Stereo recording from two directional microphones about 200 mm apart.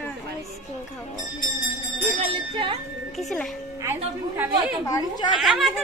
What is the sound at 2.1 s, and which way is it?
Speech, 30° right (ahead or behind).